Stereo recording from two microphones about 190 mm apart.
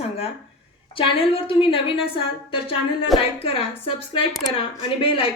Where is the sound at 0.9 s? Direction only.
30° left (ahead or behind).